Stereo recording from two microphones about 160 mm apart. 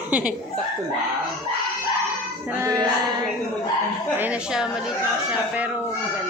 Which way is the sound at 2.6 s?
25° right (ahead or behind).